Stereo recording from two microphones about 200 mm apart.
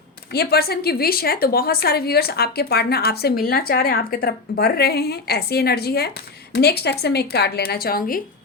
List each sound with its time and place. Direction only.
0.3 s a woman's voice: 50° left (ahead or behind)